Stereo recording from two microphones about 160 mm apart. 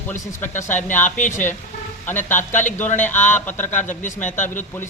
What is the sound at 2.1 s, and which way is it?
A man's voice, 10° left (ahead or behind).